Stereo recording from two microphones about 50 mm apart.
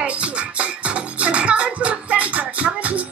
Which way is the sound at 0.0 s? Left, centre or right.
Right.